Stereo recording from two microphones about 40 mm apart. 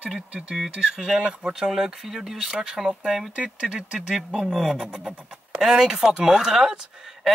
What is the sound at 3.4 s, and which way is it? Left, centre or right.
Speech, right.